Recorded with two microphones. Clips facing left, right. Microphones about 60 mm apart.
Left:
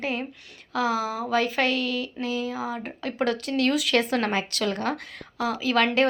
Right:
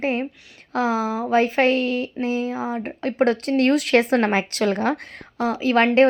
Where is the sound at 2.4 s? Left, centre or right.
Right.